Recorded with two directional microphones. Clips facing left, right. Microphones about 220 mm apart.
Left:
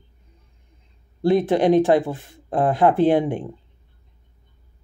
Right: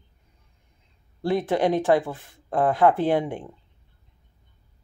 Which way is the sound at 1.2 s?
20° left (ahead or behind).